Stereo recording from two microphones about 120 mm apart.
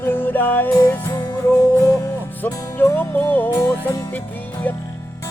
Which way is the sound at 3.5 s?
30° left (ahead or behind).